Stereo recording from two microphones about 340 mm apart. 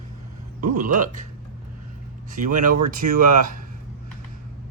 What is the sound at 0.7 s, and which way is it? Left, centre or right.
Speech, right.